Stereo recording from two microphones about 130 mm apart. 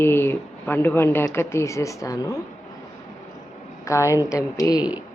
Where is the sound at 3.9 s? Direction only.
25° left (ahead or behind).